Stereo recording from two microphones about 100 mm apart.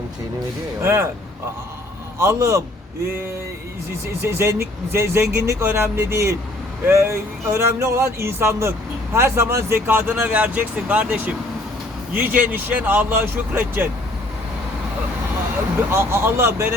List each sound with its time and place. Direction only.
0.8 s speech: 25° right (ahead or behind)
2.1 s speech: 30° right (ahead or behind)
4.2 s speech: 25° right (ahead or behind)
15.9 s speech: 25° right (ahead or behind)